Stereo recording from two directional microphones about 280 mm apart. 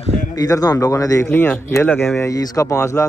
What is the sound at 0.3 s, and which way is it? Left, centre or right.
Speech, centre.